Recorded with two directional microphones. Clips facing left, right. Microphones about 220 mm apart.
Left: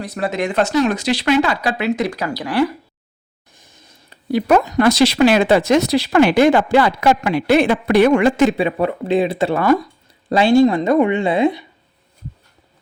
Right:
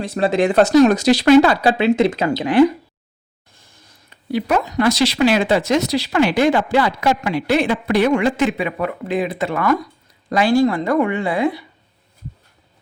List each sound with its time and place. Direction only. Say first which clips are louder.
0.0 s speech: right 4 dB; 30° right (ahead or behind)
4.1 s speech: left 4 dB; 45° left (ahead or behind)
8.4 s speech: left 4 dB; 30° left (ahead or behind)